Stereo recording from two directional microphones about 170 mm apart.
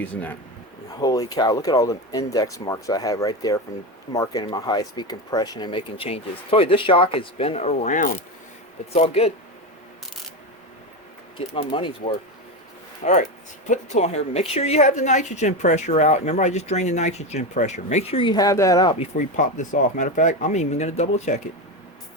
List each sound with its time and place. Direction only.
0.0 s speech: 10° left (ahead or behind)
0.9 s a woman's voice: 20° left (ahead or behind); by 9.3 s 35° left (ahead or behind)
11.3 s a woman's voice: 30° left (ahead or behind)
13.0 s a woman's voice: 45° left (ahead or behind); by 18.9 s 20° left (ahead or behind)
18.9 s speech: 50° left (ahead or behind)